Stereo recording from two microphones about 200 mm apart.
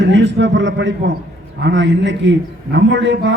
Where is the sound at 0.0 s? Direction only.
60° right (ahead or behind).